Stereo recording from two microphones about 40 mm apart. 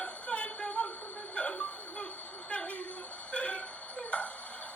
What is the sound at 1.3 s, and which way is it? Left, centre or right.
Chuckle, left.